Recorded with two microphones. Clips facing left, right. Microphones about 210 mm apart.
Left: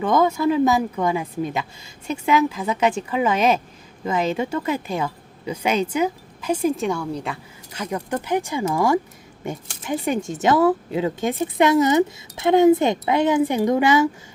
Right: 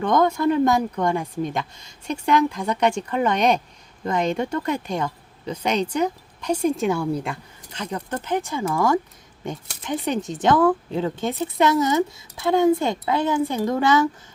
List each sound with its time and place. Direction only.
0.0 s a woman's voice: 5° left (ahead or behind)
7.7 s speech: 10° left (ahead or behind)